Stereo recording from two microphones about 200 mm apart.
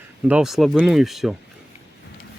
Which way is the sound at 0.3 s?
5° right (ahead or behind).